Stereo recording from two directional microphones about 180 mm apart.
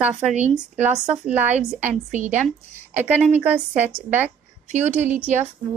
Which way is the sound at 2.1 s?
45° right (ahead or behind).